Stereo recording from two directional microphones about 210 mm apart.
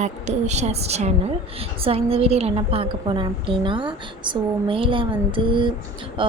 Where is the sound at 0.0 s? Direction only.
35° right (ahead or behind).